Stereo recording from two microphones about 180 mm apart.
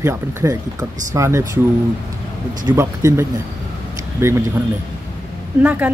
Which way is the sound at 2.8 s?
15° right (ahead or behind).